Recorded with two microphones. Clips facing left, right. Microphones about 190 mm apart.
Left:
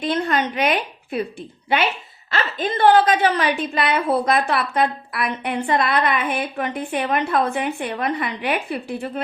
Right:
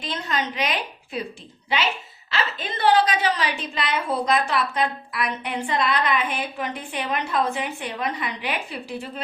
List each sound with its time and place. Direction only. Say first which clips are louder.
0.0 s a woman's voice: left 7 dB; 55° left (ahead or behind)